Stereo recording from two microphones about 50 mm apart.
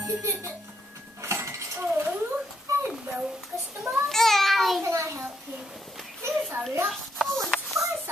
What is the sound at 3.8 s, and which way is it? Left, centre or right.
Babbling, centre.